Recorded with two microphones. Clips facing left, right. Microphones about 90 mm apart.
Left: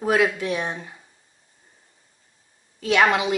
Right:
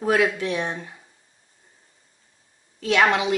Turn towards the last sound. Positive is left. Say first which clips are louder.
# even
turn(degrees=5)  # may be behind; listen again after turning